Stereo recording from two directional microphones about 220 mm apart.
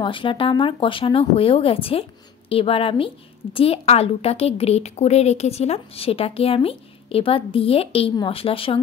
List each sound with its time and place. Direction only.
0.0 s a woman's voice: 25° left (ahead or behind)